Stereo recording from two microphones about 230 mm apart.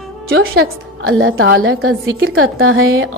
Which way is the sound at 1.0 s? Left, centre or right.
Right.